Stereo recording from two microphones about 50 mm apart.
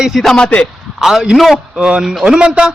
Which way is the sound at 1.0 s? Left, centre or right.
Centre.